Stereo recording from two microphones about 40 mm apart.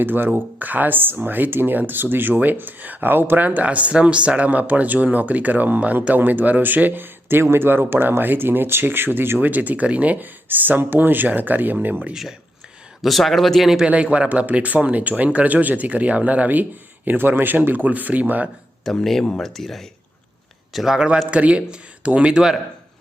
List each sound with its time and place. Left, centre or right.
0.0 s speech: right
3.7 s speech: right
8.2 s speech: right
9.4 s speech: right
10.2 s speech: right
10.8 s speech: right
13.0 s speech: centre
13.8 s speech: right
17.2 s speech: right
18.9 s speech: centre
20.7 s a man's voice: centre
21.2 s speech: right